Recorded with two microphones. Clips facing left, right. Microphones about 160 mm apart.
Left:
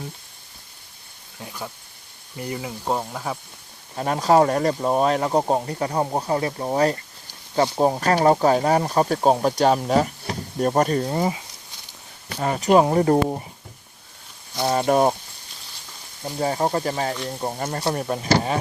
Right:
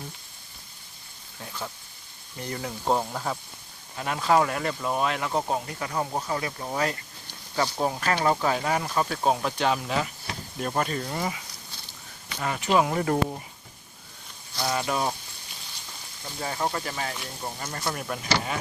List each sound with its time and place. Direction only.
1.4 s speech: 15° left (ahead or behind)
3.9 s speech: 40° left (ahead or behind)
14.5 s speech: 25° left (ahead or behind)
14.8 s speech: 50° left (ahead or behind)
16.2 s speech: 40° left (ahead or behind)